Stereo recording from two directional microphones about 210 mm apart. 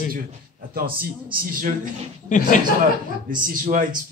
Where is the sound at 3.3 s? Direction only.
40° right (ahead or behind).